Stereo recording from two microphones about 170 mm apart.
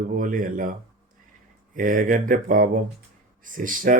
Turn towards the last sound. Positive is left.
turn(degrees=-55)  # may be behind; listen again after turning